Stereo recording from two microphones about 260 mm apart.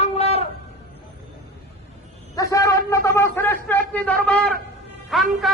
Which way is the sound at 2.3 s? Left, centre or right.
Centre.